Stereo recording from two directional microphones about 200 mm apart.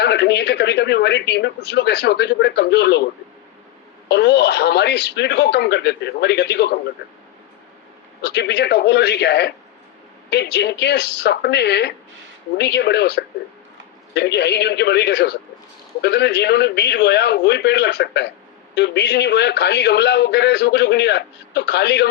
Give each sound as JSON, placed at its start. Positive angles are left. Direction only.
{"t": 0.0, "sound": "a man's voice", "side_deg": 55}
{"t": 4.1, "sound": "a man's voice", "side_deg": 55}
{"t": 8.2, "sound": "a man's voice", "side_deg": 55}